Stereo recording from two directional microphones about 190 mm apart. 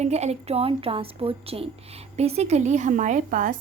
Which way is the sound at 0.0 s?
35° right (ahead or behind).